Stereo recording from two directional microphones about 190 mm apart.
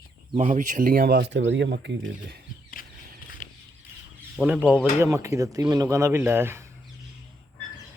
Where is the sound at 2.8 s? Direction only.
50° left (ahead or behind).